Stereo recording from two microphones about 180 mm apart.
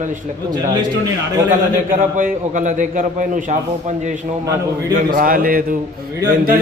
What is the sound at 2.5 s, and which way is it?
A man's voice, 45° right (ahead or behind).